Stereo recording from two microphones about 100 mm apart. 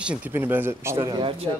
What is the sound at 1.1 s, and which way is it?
Speech, 60° right (ahead or behind).